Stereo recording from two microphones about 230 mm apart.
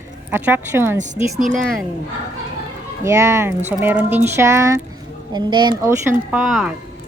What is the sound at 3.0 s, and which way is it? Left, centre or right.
A woman's voice, centre.